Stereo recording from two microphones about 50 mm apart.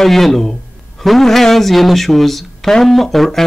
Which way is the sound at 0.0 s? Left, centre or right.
Centre.